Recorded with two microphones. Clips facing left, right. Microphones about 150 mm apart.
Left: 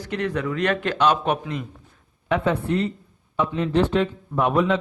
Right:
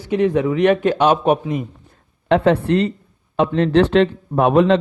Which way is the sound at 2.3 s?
80° right.